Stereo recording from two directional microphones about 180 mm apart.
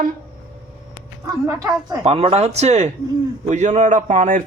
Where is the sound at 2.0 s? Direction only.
35° right (ahead or behind).